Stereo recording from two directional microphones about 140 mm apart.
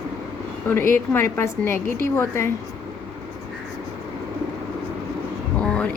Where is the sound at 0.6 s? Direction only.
15° left (ahead or behind).